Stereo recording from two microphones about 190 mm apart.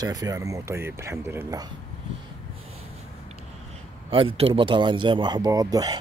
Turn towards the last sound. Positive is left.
turn(degrees=-20)  # may be behind; listen again after turning